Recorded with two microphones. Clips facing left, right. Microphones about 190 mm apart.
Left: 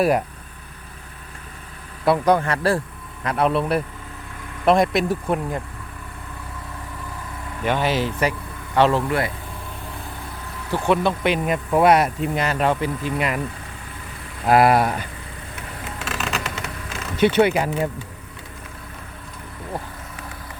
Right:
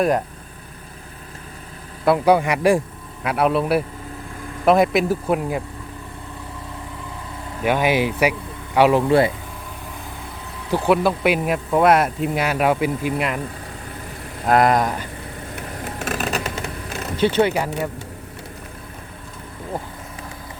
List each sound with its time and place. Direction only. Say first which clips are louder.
2.0 s speech: right 2 dB; 10° right (ahead or behind)
7.6 s speech: right 3 dB; 10° right (ahead or behind)
9.0 s speech: right 7 dB; 25° right (ahead or behind)
10.8 s speech: right 2 dB; 5° right (ahead or behind)
14.4 s speech: left 1 dB; 5° left (ahead or behind)
15.5 s vehicle: right 3 dB; 40° right (ahead or behind)
16.6 s a sound: right 3 dB; 35° right (ahead or behind)
17.2 s speech: left 1 dB; 15° left (ahead or behind)